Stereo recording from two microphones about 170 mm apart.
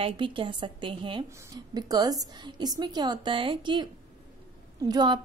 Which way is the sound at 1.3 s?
20° right (ahead or behind).